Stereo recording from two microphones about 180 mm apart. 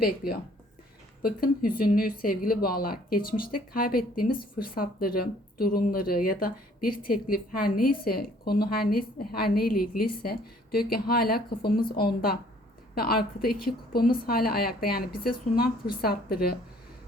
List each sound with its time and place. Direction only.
1.2 s a woman's voice: 55° left (ahead or behind)